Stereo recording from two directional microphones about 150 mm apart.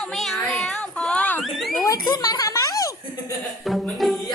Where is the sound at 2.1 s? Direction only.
25° left (ahead or behind).